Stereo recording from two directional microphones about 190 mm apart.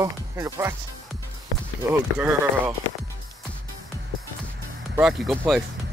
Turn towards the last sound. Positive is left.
turn(degrees=0)  # may be behind; listen again after turning